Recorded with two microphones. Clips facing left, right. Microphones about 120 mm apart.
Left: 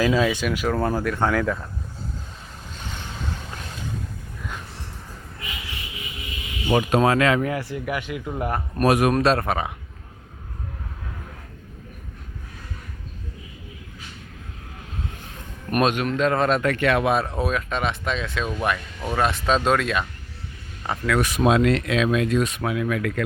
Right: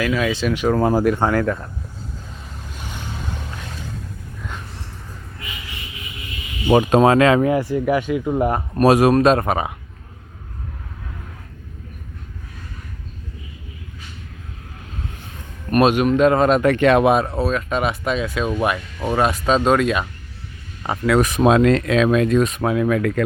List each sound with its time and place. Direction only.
0.0 s speech: 15° left (ahead or behind)
0.7 s speech: 10° right (ahead or behind)
1.0 s speech: 20° right (ahead or behind)
1.3 s speech: centre (ahead or behind)
2.7 s vehicle: 10° right (ahead or behind)
6.7 s speech: 30° right (ahead or behind)
9.2 s speech: 15° right (ahead or behind)
15.8 s speech: 10° right (ahead or behind)
16.6 s speech: 25° right (ahead or behind)
17.2 s speech: 5° right (ahead or behind)
19.2 s speech: 5° right (ahead or behind)
20.8 s speech: 20° right (ahead or behind)
21.2 s speech: 40° right (ahead or behind)